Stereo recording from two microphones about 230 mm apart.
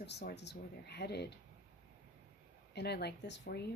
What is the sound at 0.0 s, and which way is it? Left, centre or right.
Speech, left.